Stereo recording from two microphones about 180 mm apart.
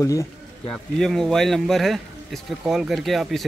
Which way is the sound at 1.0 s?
Centre (ahead or behind).